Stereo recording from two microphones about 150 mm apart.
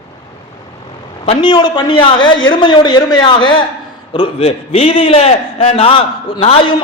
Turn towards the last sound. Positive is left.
turn(degrees=35)  # may be behind; listen again after turning